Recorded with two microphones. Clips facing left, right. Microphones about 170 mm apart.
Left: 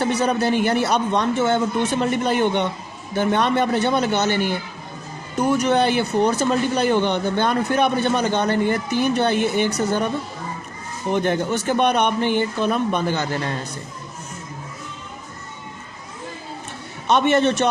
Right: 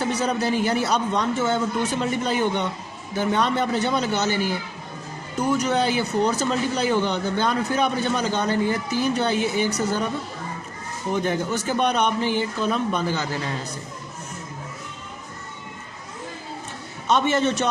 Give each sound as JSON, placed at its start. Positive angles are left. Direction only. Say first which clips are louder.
{"t": 0.0, "sound": "speech", "louder": "left 4 dB", "side_deg": 60}
{"t": 5.5, "sound": "speech", "louder": "left 4 dB", "side_deg": 60}
{"t": 11.1, "sound": "speech", "louder": "left 3 dB", "side_deg": 65}
{"t": 17.1, "sound": "speech", "louder": "left 3 dB", "side_deg": 65}